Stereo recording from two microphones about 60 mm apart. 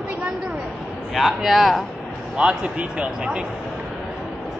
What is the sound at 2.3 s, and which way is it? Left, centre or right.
A man's voice, centre.